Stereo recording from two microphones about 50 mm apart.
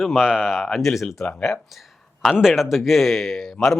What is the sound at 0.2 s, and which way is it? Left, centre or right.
Speech, centre.